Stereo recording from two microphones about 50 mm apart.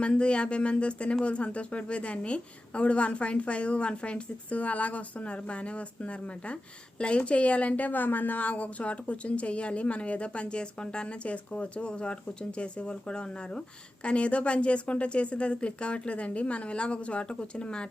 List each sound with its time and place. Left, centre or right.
0.0 s a woman's voice: left